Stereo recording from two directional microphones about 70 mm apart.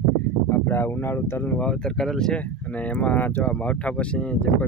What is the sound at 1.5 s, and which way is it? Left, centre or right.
Speech, centre.